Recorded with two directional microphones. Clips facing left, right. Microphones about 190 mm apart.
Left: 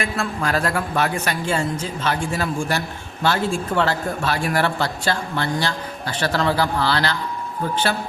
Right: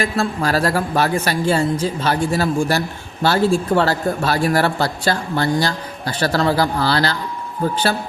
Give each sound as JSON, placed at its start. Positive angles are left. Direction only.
{"t": 0.0, "sound": "a man's voice", "side_deg": -35}